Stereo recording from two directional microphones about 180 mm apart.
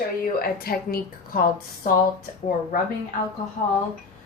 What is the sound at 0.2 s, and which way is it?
Speech, 55° left (ahead or behind).